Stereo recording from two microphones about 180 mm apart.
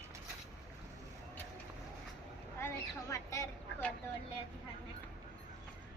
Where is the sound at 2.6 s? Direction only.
15° left (ahead or behind).